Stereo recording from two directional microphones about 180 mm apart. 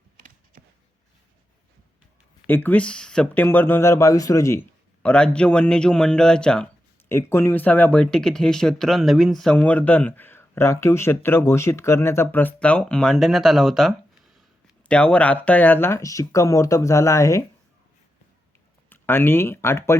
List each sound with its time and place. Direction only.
2.5 s speech: 10° left (ahead or behind)
5.0 s speech: 5° left (ahead or behind)
18.9 s speech: 10° left (ahead or behind)